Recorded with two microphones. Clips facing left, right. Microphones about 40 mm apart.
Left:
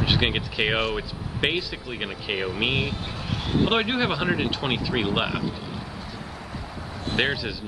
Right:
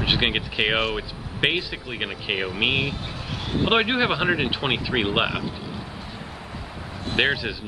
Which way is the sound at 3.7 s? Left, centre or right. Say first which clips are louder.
Right 3 dB; centre.